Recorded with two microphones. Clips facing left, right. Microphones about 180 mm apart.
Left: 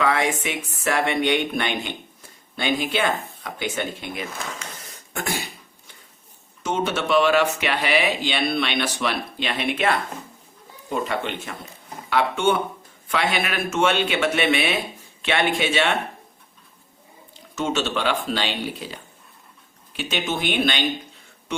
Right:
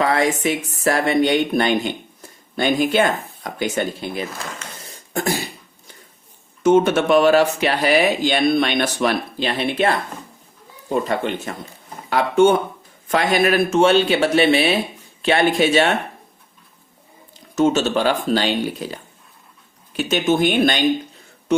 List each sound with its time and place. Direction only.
0.0 s speech: 35° right (ahead or behind)
4.9 s cough: 35° right (ahead or behind)
6.6 s speech: 50° right (ahead or behind)
17.5 s speech: 40° right (ahead or behind)
20.0 s speech: 45° right (ahead or behind)